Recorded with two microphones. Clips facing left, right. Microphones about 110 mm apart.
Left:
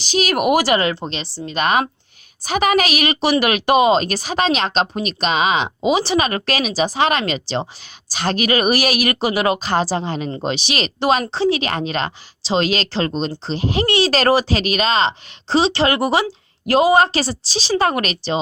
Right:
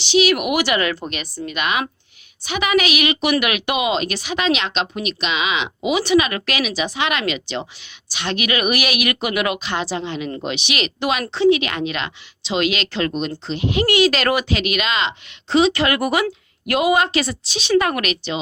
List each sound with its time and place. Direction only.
0.0 s speech: 40° left (ahead or behind)